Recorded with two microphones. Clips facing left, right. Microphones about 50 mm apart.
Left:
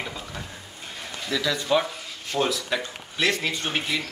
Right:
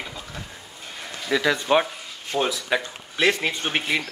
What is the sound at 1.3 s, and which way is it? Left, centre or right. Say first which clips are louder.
Speech: right 4 dB; right.